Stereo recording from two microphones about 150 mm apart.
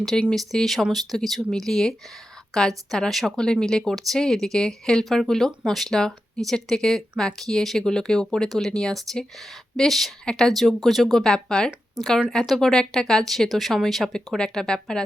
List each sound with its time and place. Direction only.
0.0 s speech: 5° left (ahead or behind)